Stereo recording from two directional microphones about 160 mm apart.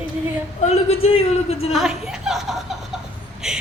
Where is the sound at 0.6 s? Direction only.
40° left (ahead or behind).